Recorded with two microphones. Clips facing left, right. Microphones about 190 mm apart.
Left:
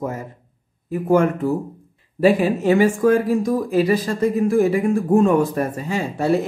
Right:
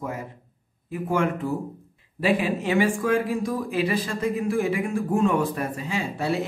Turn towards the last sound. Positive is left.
turn(degrees=45)  # may be behind; listen again after turning